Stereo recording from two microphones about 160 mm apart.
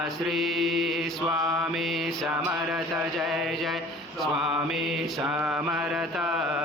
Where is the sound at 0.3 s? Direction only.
Centre (ahead or behind).